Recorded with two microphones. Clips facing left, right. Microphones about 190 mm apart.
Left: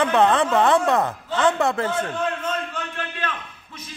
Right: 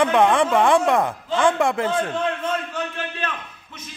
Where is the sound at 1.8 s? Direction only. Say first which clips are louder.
Right 2 dB; 25° right (ahead or behind).